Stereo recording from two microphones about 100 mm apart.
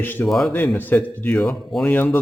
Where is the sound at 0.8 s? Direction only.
20° left (ahead or behind).